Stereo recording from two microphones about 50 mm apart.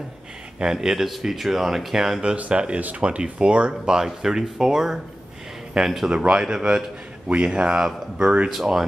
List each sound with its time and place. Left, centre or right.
0.6 s speech: centre
2.2 s speech: right; by 6.0 s centre
6.0 s speech: centre